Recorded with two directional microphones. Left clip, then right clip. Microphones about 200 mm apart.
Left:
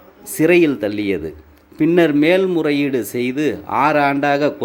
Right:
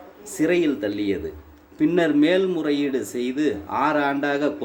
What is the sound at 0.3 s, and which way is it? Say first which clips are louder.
A man's voice: left 7 dB; 30° left (ahead or behind).